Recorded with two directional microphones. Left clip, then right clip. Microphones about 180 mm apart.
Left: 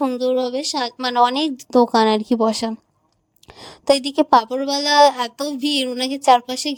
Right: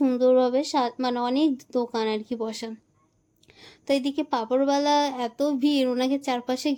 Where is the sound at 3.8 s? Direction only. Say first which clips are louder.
Left 9 dB; 45° left (ahead or behind).